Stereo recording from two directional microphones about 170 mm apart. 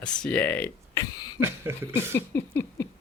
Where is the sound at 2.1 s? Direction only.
15° left (ahead or behind).